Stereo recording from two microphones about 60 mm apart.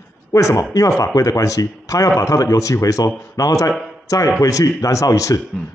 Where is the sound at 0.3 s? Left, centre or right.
Left.